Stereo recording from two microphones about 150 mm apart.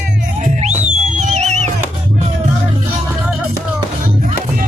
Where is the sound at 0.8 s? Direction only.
50° right (ahead or behind).